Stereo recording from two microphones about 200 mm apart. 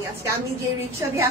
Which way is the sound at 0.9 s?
15° right (ahead or behind).